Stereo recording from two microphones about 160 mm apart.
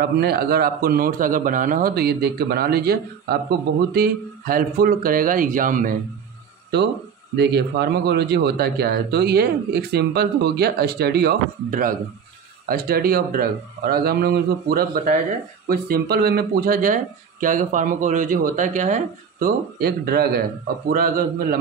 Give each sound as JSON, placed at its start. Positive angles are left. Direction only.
{"t": 0.0, "sound": "a man's voice", "side_deg": -80}
{"t": 7.3, "sound": "a man's voice", "side_deg": -90}
{"t": 19.8, "sound": "a man's voice", "side_deg": -75}